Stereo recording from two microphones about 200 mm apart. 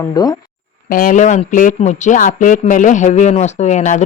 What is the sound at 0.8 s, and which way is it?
Speech, 45° left (ahead or behind).